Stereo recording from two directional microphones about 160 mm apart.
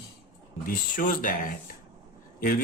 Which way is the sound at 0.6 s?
60° left (ahead or behind).